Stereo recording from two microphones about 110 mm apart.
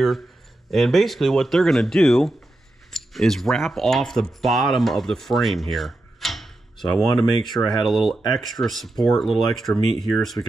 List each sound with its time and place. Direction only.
0.7 s speech: centre (ahead or behind)